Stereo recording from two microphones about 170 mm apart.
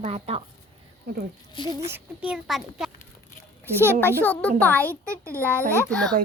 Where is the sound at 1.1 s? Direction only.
65° right (ahead or behind).